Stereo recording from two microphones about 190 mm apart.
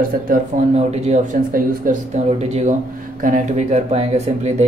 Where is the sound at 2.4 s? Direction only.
35° right (ahead or behind).